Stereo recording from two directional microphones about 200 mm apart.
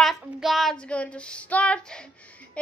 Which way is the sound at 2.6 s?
5° left (ahead or behind).